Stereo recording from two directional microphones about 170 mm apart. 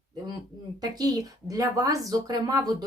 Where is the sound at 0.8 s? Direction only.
20° right (ahead or behind).